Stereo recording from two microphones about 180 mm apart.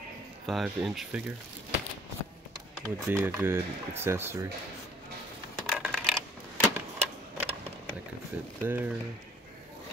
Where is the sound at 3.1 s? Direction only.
10° right (ahead or behind).